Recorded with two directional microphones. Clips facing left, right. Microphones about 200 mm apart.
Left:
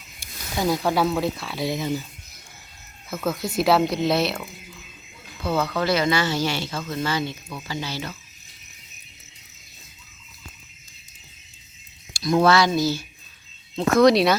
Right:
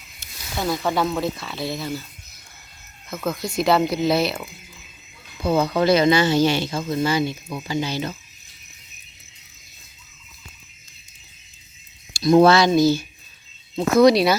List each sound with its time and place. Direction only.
0.2 s speech: 10° left (ahead or behind)
3.1 s speech: 5° left (ahead or behind)
5.4 s speech: 15° right (ahead or behind)
12.1 s speech: 25° right (ahead or behind)
13.7 s speech: centre (ahead or behind)